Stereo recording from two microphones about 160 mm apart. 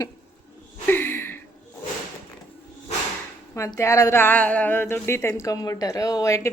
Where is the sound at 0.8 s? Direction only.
15° left (ahead or behind).